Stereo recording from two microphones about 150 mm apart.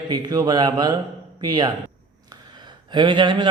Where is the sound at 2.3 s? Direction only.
30° right (ahead or behind).